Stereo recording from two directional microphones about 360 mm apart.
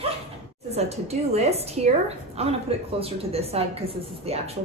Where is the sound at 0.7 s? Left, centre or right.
Centre.